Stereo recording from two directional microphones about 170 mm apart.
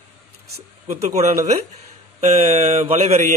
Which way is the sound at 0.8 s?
40° right (ahead or behind).